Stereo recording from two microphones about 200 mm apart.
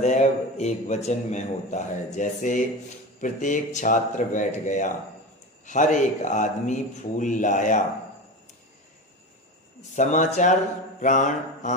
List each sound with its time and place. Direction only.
0.0 s a man's voice: 35° left (ahead or behind)
9.8 s a man's voice: 35° left (ahead or behind)
11.0 s mantra: 40° left (ahead or behind)